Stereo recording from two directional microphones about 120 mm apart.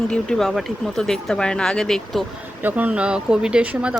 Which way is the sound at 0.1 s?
5° left (ahead or behind).